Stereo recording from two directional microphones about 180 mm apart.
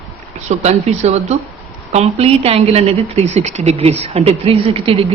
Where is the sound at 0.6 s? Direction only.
35° right (ahead or behind).